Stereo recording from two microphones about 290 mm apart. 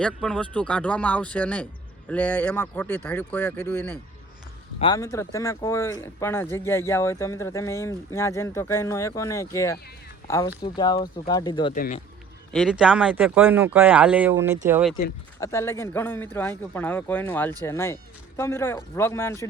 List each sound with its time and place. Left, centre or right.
0.0 s speech: centre
11.7 s speech: left
12.5 s speech: centre
15.4 s speech: centre